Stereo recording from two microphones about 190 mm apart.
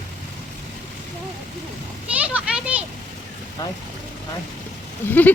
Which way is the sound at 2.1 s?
5° right (ahead or behind).